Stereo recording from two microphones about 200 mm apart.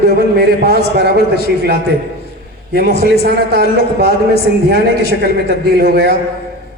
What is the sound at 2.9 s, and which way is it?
Speech, 50° left (ahead or behind).